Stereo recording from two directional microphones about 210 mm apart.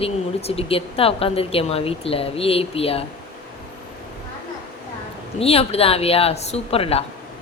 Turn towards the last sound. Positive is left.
turn(degrees=30)  # may be behind; listen again after turning